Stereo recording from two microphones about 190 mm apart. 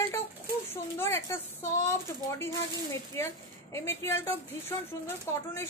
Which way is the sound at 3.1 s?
15° left (ahead or behind).